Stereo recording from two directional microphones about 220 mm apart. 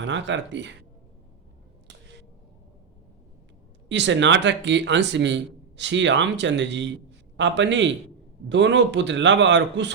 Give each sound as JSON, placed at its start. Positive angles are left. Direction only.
{"t": 0.0, "sound": "a man's voice", "side_deg": -55}
{"t": 3.8, "sound": "a man's voice", "side_deg": -55}